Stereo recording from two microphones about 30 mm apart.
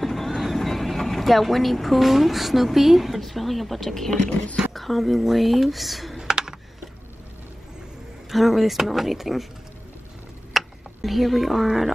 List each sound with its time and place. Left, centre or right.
0.0 s speech: centre
6.1 s computer keyboard: centre
8.3 s speech: centre
10.5 s a sound: centre